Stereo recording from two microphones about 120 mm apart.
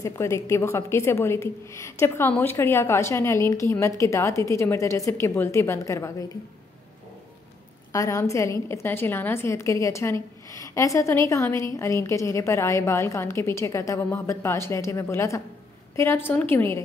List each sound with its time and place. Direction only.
0.0 s a woman's voice: 25° left (ahead or behind)
7.9 s a woman's voice: 25° left (ahead or behind)